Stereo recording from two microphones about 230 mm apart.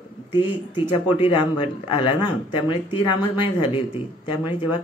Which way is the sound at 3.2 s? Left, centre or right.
Centre.